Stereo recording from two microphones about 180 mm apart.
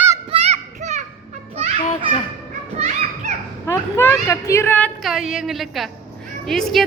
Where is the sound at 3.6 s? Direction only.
15° left (ahead or behind).